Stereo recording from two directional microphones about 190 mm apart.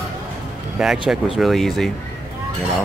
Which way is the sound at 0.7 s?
5° right (ahead or behind).